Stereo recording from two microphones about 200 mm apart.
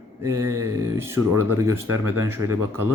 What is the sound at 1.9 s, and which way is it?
Speech, 90° right.